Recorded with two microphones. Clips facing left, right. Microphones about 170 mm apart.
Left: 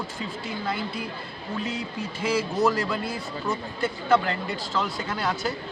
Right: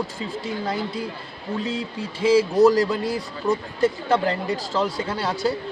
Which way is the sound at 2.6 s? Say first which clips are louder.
Right 7 dB; 40° right (ahead or behind).